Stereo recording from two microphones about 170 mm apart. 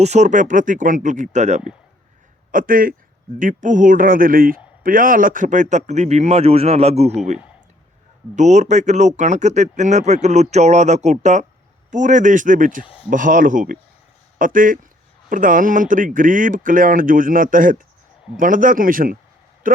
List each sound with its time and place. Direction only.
0.0 s a man's voice: 40° right (ahead or behind)
2.5 s a man's voice: 55° right (ahead or behind)
8.4 s a man's voice: 45° right (ahead or behind)